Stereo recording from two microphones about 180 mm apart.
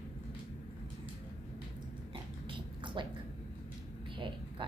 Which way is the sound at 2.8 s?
25° right (ahead or behind).